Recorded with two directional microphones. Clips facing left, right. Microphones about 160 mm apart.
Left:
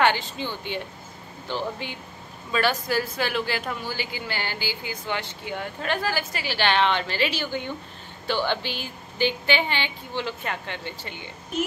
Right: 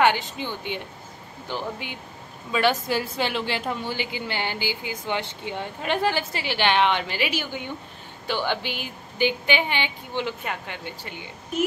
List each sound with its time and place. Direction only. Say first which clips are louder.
0.0 s a woman's voice: right 1 dB; 15° right (ahead or behind)